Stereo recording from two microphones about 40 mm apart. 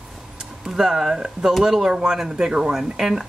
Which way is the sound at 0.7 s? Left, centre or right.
Centre.